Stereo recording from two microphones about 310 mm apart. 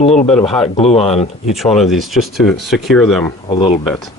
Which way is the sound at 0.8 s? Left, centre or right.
Centre.